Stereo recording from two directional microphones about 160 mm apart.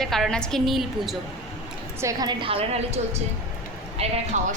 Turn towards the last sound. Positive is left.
turn(degrees=-50)  # may be behind; listen again after turning